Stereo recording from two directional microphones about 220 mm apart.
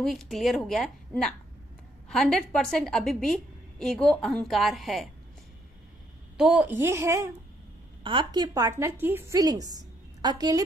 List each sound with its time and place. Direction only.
0.0 s a woman's voice: centre (ahead or behind)
6.3 s a woman's voice: 5° right (ahead or behind)